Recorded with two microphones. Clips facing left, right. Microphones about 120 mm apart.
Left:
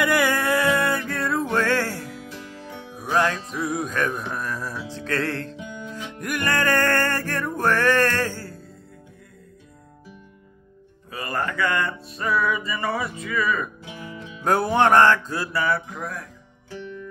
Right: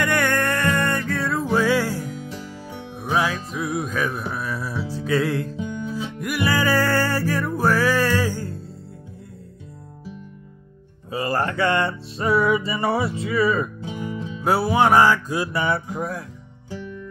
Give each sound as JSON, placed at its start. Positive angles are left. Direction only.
{"t": 0.0, "sound": "music", "side_deg": 5}
{"t": 11.1, "sound": "music", "side_deg": -25}
{"t": 14.4, "sound": "music", "side_deg": -5}